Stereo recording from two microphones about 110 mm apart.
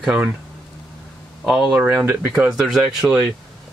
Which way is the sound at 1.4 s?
5° right (ahead or behind).